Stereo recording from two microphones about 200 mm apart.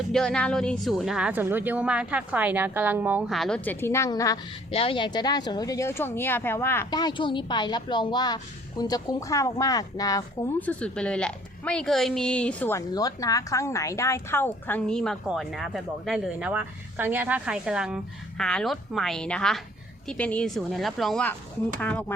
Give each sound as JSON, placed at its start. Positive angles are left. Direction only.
{"t": 0.1, "sound": "speech", "side_deg": 5}
{"t": 4.7, "sound": "speech", "side_deg": 30}